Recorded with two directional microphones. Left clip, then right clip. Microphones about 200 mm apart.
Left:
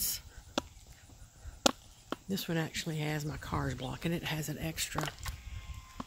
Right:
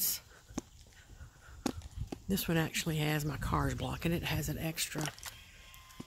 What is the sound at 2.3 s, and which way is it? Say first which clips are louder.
Speech: right 3 dB; 25° right (ahead or behind).